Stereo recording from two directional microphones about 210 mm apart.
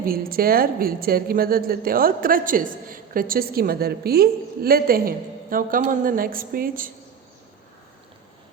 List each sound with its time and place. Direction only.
0.0 s a woman's voice: 45° right (ahead or behind)